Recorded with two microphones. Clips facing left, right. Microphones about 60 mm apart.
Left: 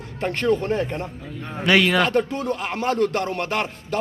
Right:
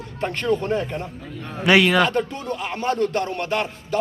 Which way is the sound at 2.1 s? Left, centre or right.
Left.